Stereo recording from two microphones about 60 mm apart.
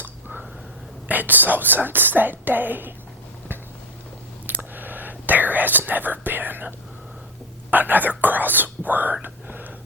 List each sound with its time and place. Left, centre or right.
1.0 s speech: right
4.4 s whispering: right
7.7 s speech: right
9.2 s whispering: right